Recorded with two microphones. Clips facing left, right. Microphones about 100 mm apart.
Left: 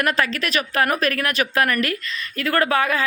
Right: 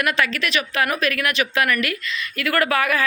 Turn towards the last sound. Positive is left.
turn(degrees=30)  # may be behind; listen again after turning